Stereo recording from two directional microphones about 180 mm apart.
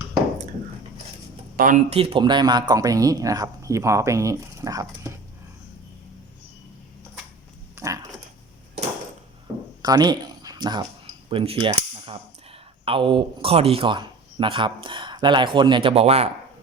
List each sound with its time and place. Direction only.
1.5 s speech: 50° right (ahead or behind)
1.9 s speech: 30° right (ahead or behind)
7.8 s dog: 15° right (ahead or behind)
9.8 s speech: 20° right (ahead or behind)
11.3 s cutlery: 30° right (ahead or behind)